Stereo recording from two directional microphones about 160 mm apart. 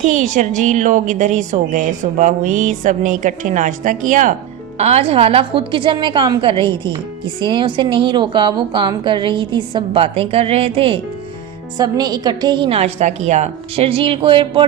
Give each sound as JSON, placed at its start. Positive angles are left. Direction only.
{"t": 0.0, "sound": "a woman's voice", "side_deg": -50}
{"t": 4.8, "sound": "a woman's voice", "side_deg": -40}
{"t": 11.8, "sound": "a woman's voice", "side_deg": -25}